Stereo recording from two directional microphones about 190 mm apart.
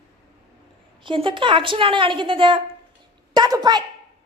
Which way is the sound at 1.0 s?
25° right (ahead or behind).